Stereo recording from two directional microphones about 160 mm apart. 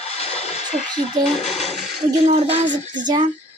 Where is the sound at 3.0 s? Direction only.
30° right (ahead or behind).